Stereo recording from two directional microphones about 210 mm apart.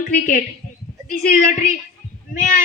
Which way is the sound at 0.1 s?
40° left (ahead or behind).